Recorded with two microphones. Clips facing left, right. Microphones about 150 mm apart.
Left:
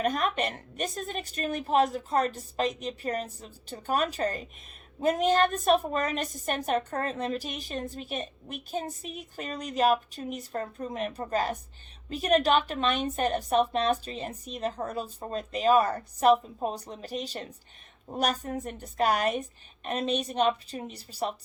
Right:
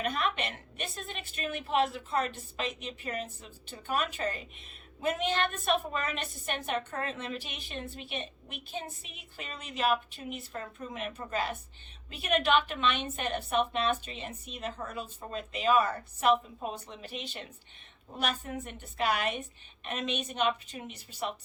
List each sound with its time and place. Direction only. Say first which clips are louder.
0.0 s a woman's voice: left 4 dB; 40° left (ahead or behind)